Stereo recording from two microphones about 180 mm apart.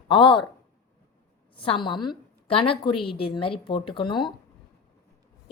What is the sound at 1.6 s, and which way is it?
A woman's voice, 30° left (ahead or behind).